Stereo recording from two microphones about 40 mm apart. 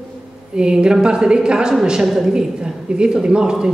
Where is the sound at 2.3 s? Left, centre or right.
Centre.